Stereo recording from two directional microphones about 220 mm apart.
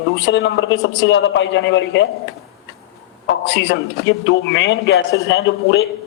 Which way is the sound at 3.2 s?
55° left (ahead or behind).